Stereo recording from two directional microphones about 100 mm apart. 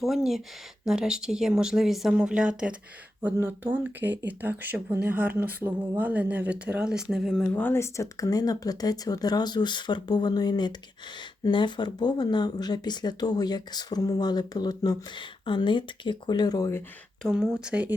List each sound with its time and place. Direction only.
0.0 s speech: centre (ahead or behind)
3.3 s speech: 20° right (ahead or behind)
7.5 s speech: 20° left (ahead or behind)
17.2 s speech: 5° right (ahead or behind)